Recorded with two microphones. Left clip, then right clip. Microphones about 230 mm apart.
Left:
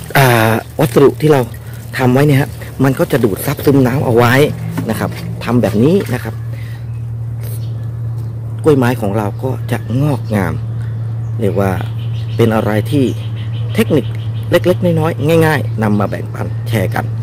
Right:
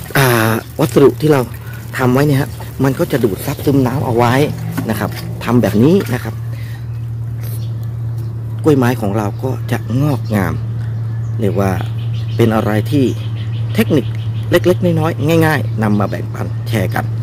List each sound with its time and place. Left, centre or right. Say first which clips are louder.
0.1 s pour: left 3 dB; centre
2.0 s a man's voice: left 2 dB; centre
4.8 s speech: left 1 dB; centre
8.6 s speech: left 1 dB; centre